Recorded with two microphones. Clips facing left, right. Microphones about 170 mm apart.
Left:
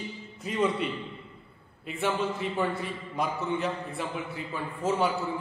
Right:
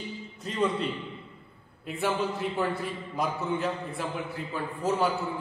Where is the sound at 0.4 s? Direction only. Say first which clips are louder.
Left 1 dB; 10° left (ahead or behind).